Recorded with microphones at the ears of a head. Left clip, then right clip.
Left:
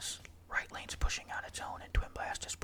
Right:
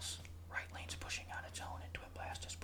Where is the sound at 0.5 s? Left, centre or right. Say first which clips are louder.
Left 8 dB; left.